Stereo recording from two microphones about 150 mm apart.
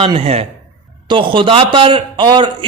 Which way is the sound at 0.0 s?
40° right (ahead or behind).